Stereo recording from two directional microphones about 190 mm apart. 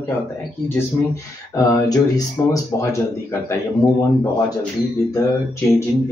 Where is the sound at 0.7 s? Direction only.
15° left (ahead or behind).